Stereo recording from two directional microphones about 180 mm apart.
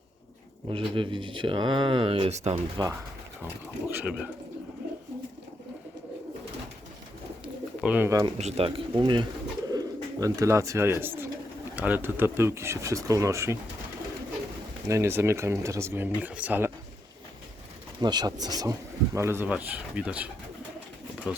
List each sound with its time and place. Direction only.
0.7 s speech: 25° right (ahead or behind)
2.8 s speech: 25° right (ahead or behind)
3.4 s speech: 10° right (ahead or behind)
7.4 s bird: 5° right (ahead or behind)
8.4 s speech: 35° right (ahead or behind); by 13.6 s 15° right (ahead or behind)
14.8 s speech: 15° right (ahead or behind)
18.0 s speech: 25° right (ahead or behind); by 20.3 s 10° right (ahead or behind)